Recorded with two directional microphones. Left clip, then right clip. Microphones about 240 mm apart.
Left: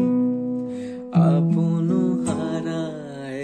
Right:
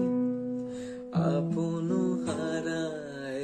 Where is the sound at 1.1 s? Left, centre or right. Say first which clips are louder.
Left 7 dB; left.